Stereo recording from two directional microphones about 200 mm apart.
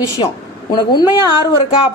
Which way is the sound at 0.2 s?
20° left (ahead or behind).